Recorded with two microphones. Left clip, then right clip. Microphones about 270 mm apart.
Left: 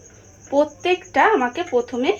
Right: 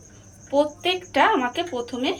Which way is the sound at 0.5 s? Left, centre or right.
Left.